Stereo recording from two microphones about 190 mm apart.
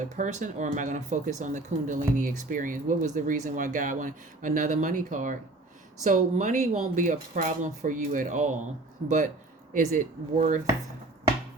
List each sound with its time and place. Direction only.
0.0 s speech: 40° right (ahead or behind)